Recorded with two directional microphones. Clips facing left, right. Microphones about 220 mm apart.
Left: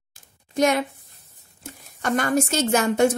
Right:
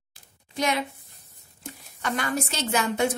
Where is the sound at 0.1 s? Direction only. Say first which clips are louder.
Left 8 dB; 45° left (ahead or behind).